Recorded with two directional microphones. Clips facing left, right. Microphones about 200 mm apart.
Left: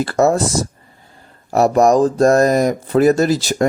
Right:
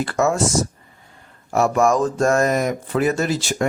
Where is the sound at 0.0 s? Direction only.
35° left (ahead or behind).